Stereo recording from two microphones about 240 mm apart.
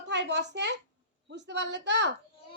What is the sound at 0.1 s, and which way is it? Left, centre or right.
A child's voice, right.